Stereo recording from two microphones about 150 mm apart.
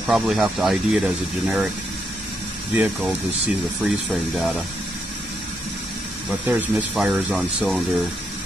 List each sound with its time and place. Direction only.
0.0 s speech: centre (ahead or behind)
2.7 s speech: 5° right (ahead or behind)
6.4 s speech: 10° right (ahead or behind)